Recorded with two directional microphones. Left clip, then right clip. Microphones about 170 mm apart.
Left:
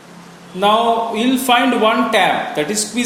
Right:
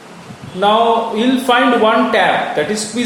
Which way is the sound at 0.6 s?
35° left (ahead or behind).